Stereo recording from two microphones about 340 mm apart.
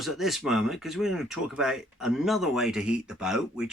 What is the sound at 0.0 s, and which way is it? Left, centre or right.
Speech, centre.